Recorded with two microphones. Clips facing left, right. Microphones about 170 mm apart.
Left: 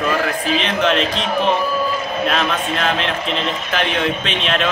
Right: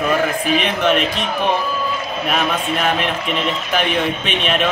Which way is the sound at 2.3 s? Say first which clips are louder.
Even; 10° right (ahead or behind).